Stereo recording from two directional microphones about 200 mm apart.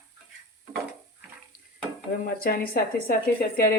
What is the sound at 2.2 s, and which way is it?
Speech, 45° left (ahead or behind).